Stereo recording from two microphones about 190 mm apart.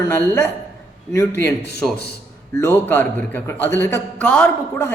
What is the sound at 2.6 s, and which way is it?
A man's voice, 10° left (ahead or behind).